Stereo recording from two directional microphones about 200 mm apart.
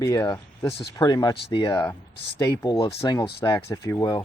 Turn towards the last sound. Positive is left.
turn(degrees=15)  # may be behind; listen again after turning